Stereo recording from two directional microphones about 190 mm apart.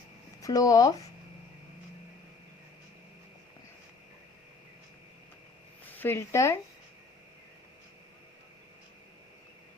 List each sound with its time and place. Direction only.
0.4 s speech: 20° left (ahead or behind)
5.8 s speech: 10° left (ahead or behind)